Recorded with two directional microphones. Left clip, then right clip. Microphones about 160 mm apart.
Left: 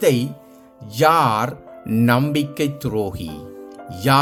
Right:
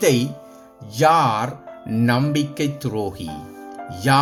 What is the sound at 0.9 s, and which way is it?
Speech, 35° left (ahead or behind).